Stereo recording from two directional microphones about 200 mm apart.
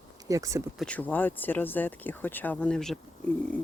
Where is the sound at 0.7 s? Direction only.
5° left (ahead or behind).